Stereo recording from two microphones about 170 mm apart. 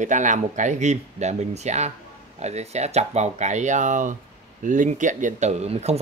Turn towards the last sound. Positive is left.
turn(degrees=-40)  # may be behind; listen again after turning